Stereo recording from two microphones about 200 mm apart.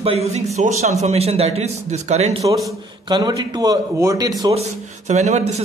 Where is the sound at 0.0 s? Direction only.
30° right (ahead or behind).